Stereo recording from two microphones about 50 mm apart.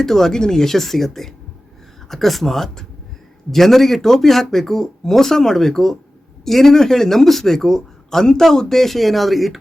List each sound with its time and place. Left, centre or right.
0.0 s speech: centre